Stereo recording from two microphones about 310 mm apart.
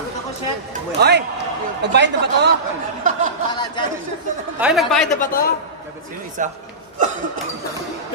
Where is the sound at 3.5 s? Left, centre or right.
Centre.